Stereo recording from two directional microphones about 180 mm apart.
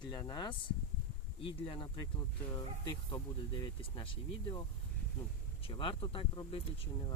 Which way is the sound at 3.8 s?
30° left (ahead or behind).